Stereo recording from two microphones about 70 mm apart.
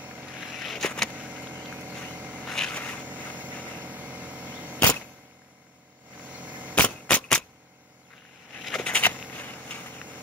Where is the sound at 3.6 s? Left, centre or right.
Right.